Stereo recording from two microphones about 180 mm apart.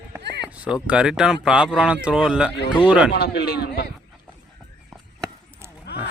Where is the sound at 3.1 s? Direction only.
60° left (ahead or behind).